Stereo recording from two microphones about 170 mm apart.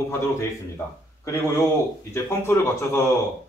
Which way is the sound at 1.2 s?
20° left (ahead or behind).